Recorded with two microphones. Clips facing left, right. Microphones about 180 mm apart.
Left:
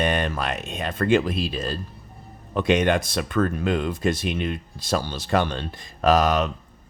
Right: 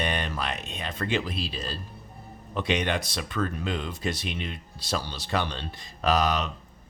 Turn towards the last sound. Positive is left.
turn(degrees=50)  # may be behind; listen again after turning